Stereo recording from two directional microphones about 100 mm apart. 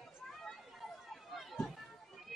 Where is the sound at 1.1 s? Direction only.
Centre (ahead or behind).